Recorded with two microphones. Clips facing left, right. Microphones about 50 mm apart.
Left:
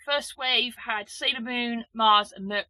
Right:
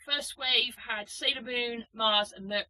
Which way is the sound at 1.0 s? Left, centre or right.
Left.